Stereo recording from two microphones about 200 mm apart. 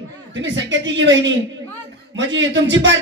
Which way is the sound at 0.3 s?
65° right (ahead or behind).